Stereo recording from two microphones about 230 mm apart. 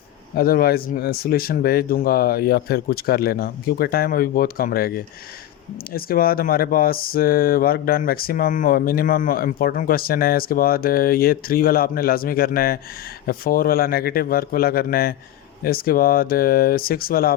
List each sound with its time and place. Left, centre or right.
0.3 s speech: left